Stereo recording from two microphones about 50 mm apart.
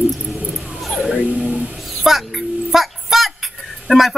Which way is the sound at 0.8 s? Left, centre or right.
Centre.